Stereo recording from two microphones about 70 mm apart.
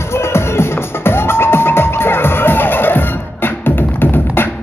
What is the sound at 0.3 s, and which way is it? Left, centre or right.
Music, left.